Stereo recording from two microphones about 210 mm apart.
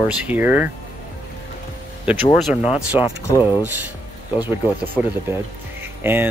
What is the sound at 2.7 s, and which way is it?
Speech, 5° right (ahead or behind).